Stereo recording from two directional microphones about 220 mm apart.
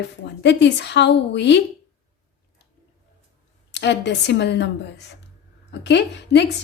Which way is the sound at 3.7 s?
50° left (ahead or behind).